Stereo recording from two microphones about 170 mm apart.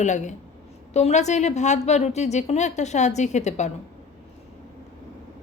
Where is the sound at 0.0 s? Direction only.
45° left (ahead or behind).